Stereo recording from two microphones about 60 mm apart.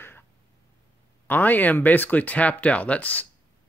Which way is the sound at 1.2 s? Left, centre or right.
Left.